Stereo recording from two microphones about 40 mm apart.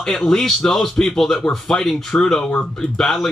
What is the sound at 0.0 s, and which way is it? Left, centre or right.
A man's voice, centre.